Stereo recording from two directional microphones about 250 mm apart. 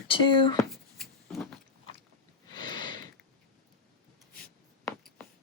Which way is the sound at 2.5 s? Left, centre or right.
Centre.